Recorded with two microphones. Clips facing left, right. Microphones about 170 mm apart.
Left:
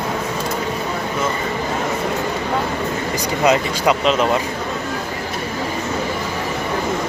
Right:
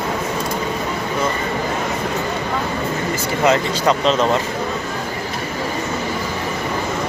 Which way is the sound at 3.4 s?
15° left (ahead or behind).